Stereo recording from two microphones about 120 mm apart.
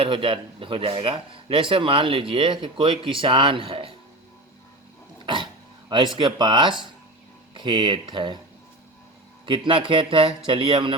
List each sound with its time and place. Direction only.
0.0 s speech: 45° right (ahead or behind)
5.2 s dog: 45° right (ahead or behind)
5.9 s speech: 40° right (ahead or behind)
9.5 s speech: 45° right (ahead or behind)